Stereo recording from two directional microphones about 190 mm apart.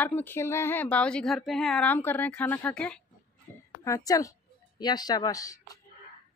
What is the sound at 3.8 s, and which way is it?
Speech, 15° left (ahead or behind).